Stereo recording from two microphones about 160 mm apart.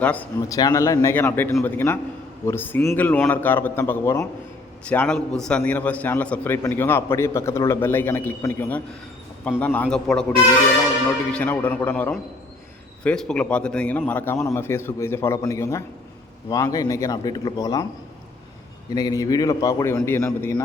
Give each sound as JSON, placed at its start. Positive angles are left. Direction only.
{"t": 0.0, "sound": "a man's voice", "side_deg": 10}
{"t": 0.4, "sound": "a man's voice", "side_deg": 20}
{"t": 11.3, "sound": "a man's voice", "side_deg": 10}
{"t": 18.9, "sound": "a man's voice", "side_deg": 20}